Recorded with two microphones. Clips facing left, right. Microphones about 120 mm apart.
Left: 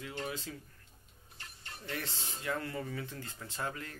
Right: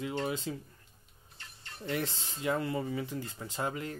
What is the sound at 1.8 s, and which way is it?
Speech, 20° right (ahead or behind).